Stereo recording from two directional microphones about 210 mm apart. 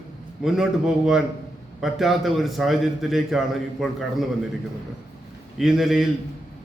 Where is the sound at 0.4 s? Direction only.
Centre (ahead or behind).